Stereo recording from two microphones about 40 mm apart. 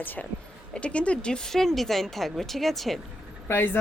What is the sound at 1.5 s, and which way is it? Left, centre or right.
A woman's voice, centre.